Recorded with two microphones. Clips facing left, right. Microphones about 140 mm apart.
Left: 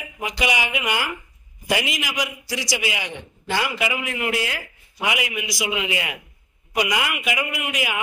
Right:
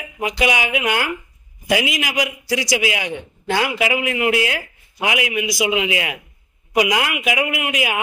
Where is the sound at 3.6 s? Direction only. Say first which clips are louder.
Right 6 dB; 90° right.